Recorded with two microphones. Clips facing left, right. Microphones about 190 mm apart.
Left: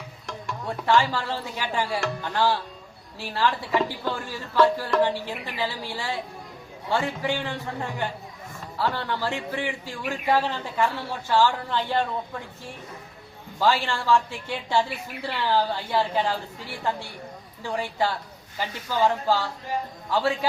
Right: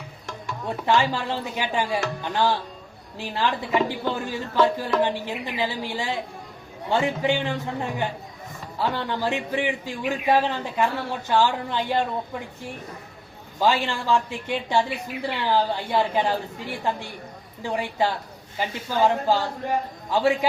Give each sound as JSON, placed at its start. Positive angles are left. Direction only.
{"t": 0.7, "sound": "a woman's voice", "side_deg": -20}
{"t": 13.6, "sound": "a woman's voice", "side_deg": -20}